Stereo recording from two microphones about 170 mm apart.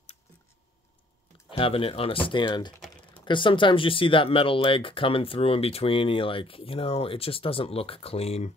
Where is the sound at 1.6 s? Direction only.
30° left (ahead or behind).